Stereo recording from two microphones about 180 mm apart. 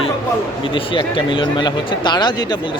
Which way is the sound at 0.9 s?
25° left (ahead or behind).